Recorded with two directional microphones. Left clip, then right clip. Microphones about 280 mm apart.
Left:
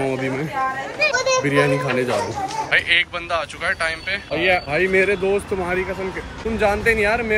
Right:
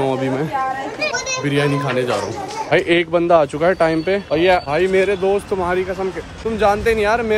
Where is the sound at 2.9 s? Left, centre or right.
Right.